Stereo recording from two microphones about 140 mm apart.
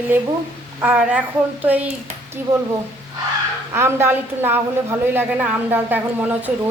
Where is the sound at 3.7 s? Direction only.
20° right (ahead or behind).